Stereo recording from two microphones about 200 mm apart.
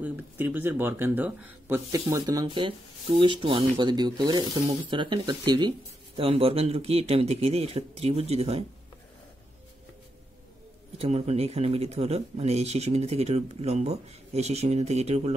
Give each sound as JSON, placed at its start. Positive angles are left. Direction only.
{"t": 0.0, "sound": "speech", "side_deg": -10}
{"t": 11.0, "sound": "speech", "side_deg": -30}